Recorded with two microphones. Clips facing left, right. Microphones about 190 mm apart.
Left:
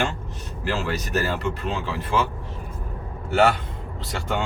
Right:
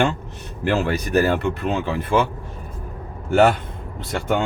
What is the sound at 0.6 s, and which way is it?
Speech, 60° right (ahead or behind).